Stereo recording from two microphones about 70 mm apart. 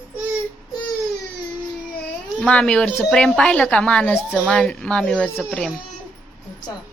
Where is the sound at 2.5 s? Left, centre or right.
Centre.